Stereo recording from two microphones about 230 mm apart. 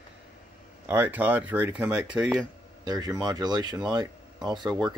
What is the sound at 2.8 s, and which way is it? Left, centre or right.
Speech, centre.